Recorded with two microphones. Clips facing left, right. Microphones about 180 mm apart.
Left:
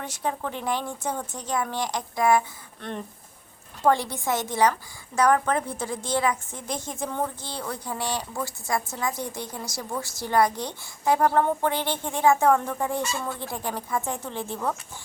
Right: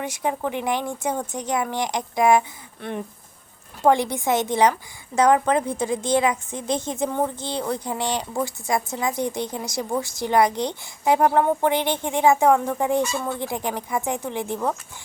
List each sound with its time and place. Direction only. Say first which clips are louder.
0.0 s a woman's voice: right 4 dB; 15° right (ahead or behind)
3.8 s a woman's voice: right 4 dB; 15° right (ahead or behind)